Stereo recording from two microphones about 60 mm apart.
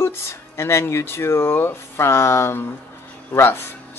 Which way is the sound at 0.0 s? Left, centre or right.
Left.